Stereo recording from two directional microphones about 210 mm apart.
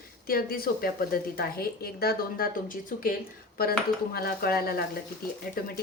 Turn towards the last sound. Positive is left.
turn(degrees=45)  # may be behind; listen again after turning